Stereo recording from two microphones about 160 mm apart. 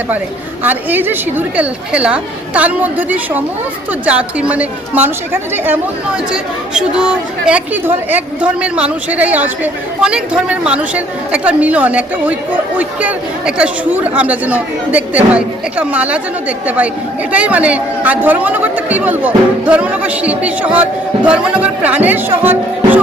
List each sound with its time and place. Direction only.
0.6 s speech: 10° right (ahead or behind)